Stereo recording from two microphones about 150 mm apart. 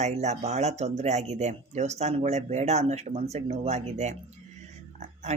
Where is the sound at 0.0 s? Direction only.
50° right (ahead or behind).